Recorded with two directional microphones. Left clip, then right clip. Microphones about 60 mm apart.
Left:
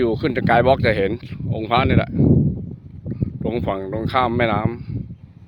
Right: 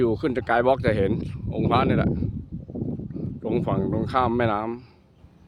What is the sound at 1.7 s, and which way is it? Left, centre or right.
Speech, centre.